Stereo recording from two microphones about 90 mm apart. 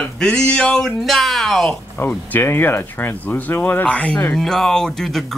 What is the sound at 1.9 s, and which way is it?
Speech, 20° left (ahead or behind).